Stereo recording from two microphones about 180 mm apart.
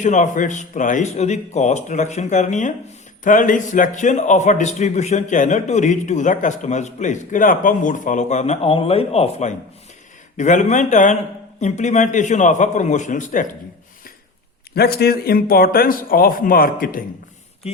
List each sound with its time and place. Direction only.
0.0 s a man's voice: 45° left (ahead or behind)
14.8 s speech: 60° left (ahead or behind)